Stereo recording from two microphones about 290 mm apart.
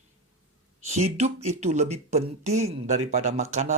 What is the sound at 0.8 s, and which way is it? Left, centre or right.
Speech, right.